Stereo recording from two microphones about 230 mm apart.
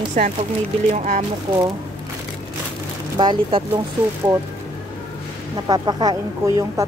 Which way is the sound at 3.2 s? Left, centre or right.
Right.